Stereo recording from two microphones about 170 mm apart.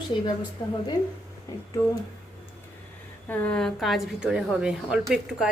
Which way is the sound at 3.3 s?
10° left (ahead or behind).